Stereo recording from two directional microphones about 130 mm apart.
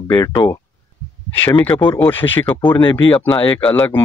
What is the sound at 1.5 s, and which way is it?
Speech, 40° left (ahead or behind).